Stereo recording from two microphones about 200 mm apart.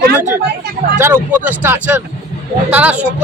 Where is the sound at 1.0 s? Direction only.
10° right (ahead or behind).